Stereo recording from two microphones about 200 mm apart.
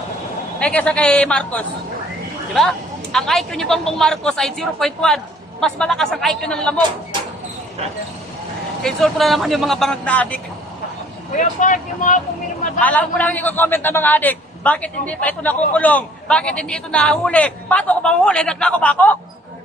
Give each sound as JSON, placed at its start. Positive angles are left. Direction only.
{"t": 0.6, "sound": "speech", "side_deg": 5}
{"t": 8.8, "sound": "speech", "side_deg": 0}
{"t": 11.3, "sound": "speech", "side_deg": 40}
{"t": 12.8, "sound": "a man's voice", "side_deg": 10}